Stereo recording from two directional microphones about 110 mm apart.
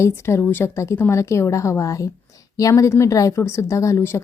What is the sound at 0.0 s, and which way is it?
A woman's voice, 25° left (ahead or behind).